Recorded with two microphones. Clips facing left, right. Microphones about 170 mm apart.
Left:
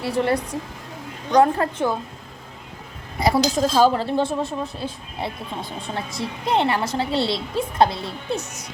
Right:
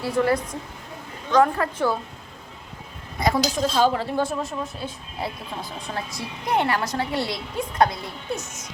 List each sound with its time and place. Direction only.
0.0 s a woman's voice: 25° left (ahead or behind)
1.4 s a woman's voice: 30° left (ahead or behind)
3.2 s a woman's voice: 30° left (ahead or behind)